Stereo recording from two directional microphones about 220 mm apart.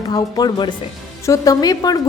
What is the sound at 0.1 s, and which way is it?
A woman's voice, 15° left (ahead or behind).